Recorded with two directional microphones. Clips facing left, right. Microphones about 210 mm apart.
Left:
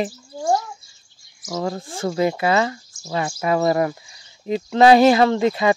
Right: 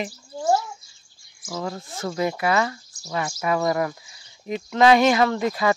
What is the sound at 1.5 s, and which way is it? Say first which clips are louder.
Speech: left 5 dB; 30° left (ahead or behind).